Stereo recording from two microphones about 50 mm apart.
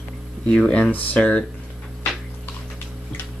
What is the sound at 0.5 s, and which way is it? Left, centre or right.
Speech, left.